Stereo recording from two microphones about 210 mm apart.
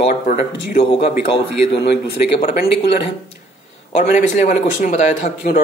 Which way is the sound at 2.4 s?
45° left (ahead or behind).